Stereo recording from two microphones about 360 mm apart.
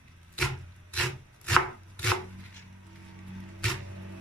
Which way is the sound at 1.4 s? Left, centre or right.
Centre.